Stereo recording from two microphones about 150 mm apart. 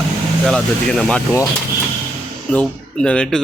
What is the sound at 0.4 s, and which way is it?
Speech, 5° left (ahead or behind).